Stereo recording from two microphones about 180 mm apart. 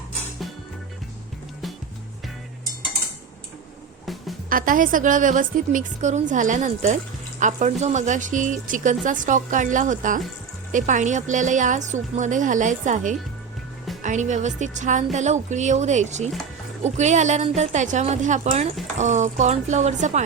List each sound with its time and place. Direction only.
4.0 s music: centre (ahead or behind)
4.4 s a woman's voice: 50° right (ahead or behind)